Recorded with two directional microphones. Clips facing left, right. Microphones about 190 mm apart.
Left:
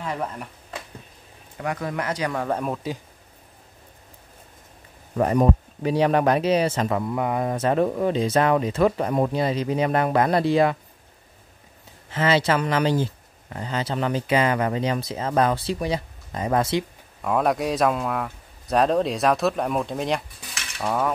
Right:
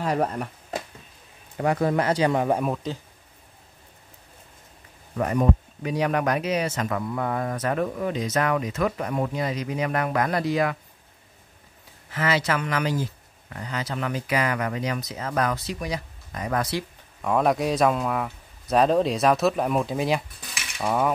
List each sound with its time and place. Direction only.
0.0 s a sound: 40° right (ahead or behind)
1.6 s speech: 30° right (ahead or behind)
2.4 s speech: 5° right (ahead or behind)
5.1 s speech: 35° left (ahead or behind)
12.1 s speech: 25° left (ahead or behind)
17.2 s a man's voice: centre (ahead or behind)
20.7 s mechanisms: 5° right (ahead or behind)